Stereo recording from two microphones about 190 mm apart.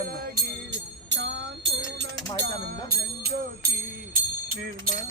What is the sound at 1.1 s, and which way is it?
Music, 65° right (ahead or behind).